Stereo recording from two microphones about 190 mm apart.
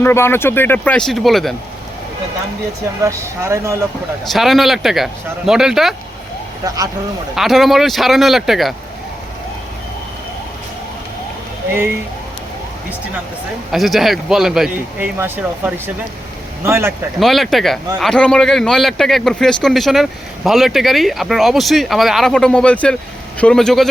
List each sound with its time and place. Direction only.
0.0 s speech: 10° left (ahead or behind)
3.0 s speech: 15° right (ahead or behind)
4.3 s a man's voice: centre (ahead or behind)
7.3 s a man's voice: centre (ahead or behind)
13.7 s a man's voice: centre (ahead or behind)
17.2 s a man's voice: centre (ahead or behind)